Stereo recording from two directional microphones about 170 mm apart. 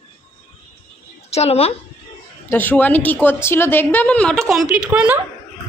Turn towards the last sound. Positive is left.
turn(degrees=-10)  # may be behind; listen again after turning